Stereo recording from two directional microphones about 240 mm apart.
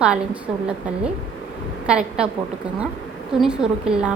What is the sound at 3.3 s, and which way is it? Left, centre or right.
Speech, centre.